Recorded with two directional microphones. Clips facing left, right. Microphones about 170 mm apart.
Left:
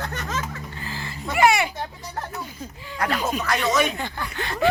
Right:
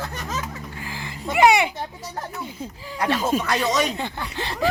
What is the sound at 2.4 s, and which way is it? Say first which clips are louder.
Speech: right 3 dB; 25° right (ahead or behind).